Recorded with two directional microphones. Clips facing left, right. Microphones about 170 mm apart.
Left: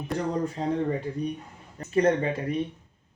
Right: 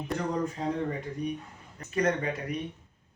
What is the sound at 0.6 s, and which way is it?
Speech, 30° left (ahead or behind).